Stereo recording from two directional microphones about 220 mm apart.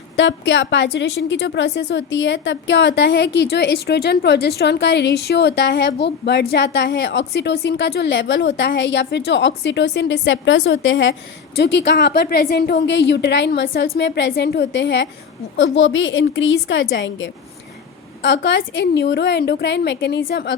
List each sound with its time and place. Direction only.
0.2 s a woman's voice: 55° left (ahead or behind)